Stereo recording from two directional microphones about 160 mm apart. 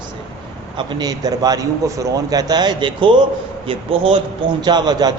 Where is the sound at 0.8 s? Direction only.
30° right (ahead or behind).